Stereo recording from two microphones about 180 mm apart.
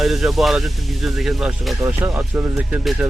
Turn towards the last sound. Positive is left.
turn(degrees=-10)  # may be behind; listen again after turning